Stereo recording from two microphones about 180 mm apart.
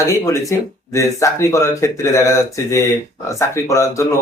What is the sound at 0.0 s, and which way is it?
Speech, 15° left (ahead or behind).